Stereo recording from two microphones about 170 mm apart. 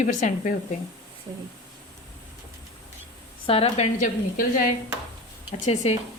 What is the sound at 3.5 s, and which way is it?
A woman's voice, 35° left (ahead or behind).